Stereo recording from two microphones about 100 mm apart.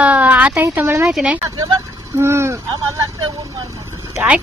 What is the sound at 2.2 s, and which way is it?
Speech, 25° right (ahead or behind).